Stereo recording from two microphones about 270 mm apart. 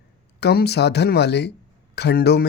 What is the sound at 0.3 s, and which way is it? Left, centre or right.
Speech, left.